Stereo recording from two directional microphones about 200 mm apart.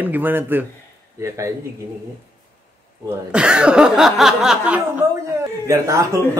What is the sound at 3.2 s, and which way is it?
Speech, 5° right (ahead or behind).